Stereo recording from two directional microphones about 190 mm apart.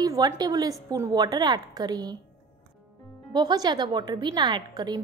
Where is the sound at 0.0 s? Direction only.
20° right (ahead or behind).